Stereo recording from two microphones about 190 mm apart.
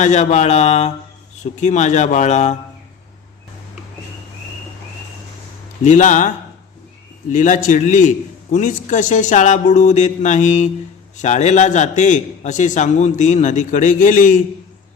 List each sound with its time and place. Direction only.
0.0 s a man's voice: 40° left (ahead or behind)
5.8 s a man's voice: 40° left (ahead or behind)
7.3 s a man's voice: 40° left (ahead or behind)